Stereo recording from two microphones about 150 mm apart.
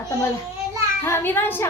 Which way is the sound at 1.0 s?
15° left (ahead or behind).